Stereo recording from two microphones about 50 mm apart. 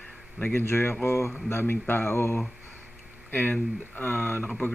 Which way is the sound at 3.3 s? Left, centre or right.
Left.